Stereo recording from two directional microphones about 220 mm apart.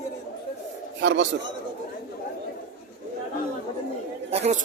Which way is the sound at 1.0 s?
55° right (ahead or behind).